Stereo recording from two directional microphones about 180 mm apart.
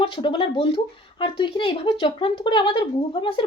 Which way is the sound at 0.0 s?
30° left (ahead or behind).